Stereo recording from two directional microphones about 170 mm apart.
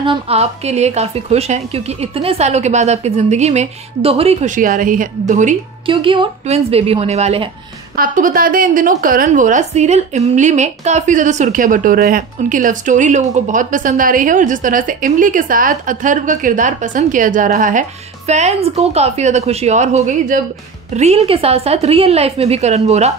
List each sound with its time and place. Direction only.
0.0 s a woman's voice: 35° right (ahead or behind)
5.9 s a woman's voice: 30° right (ahead or behind)
7.9 s a woman's voice: 55° right (ahead or behind); by 23.1 s 40° right (ahead or behind)